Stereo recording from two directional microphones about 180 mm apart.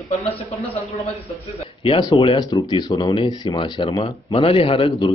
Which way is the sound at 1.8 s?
25° left (ahead or behind).